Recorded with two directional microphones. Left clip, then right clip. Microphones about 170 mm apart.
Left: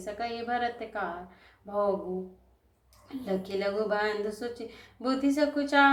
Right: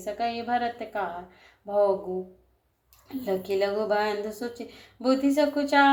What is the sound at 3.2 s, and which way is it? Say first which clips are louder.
Speech: right 5 dB; 30° right (ahead or behind).